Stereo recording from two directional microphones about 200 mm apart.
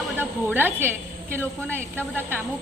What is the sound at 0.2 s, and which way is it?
A woman's voice, 10° right (ahead or behind).